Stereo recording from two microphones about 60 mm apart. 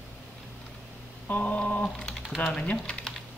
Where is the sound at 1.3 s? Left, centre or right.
Left.